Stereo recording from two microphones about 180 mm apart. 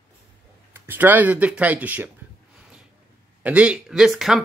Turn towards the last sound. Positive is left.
turn(degrees=-5)  # may be behind; listen again after turning